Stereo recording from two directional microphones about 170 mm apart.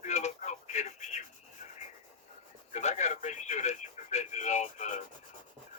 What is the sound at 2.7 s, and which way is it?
Radio, 40° left (ahead or behind).